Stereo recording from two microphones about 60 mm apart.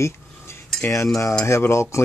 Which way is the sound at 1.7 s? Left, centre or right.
Left.